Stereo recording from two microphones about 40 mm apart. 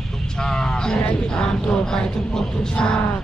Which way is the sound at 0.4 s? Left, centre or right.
Centre.